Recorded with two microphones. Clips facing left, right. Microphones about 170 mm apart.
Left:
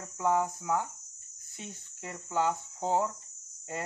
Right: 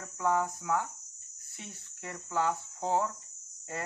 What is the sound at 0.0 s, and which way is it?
Speech, 20° left (ahead or behind).